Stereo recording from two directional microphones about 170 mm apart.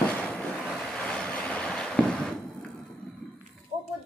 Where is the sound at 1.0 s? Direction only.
5° left (ahead or behind).